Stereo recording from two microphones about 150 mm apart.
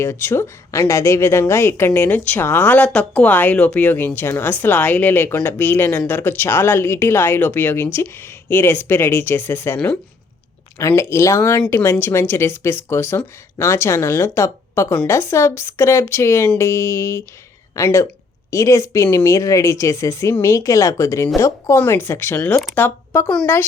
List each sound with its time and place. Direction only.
0.0 s a woman's voice: 15° left (ahead or behind)
10.8 s a woman's voice: 20° left (ahead or behind)